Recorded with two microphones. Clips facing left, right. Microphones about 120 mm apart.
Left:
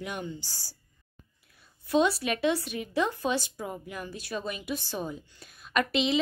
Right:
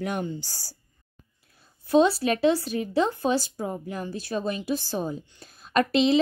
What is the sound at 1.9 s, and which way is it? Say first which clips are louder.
A woman's voice: right 5 dB; 30° right (ahead or behind).